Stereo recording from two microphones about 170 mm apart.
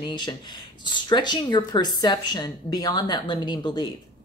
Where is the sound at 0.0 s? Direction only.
25° left (ahead or behind).